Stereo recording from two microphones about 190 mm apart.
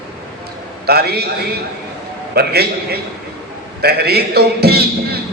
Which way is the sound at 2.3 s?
55° right (ahead or behind).